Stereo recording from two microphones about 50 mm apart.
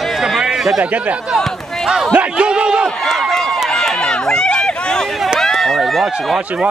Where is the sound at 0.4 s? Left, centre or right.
Centre.